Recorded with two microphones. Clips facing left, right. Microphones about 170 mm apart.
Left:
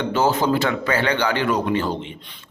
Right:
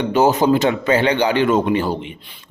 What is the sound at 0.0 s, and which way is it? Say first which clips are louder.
Speech: right 4 dB; 15° right (ahead or behind).